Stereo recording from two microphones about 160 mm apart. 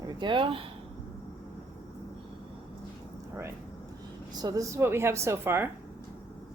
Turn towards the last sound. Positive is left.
turn(degrees=-15)  # may be behind; listen again after turning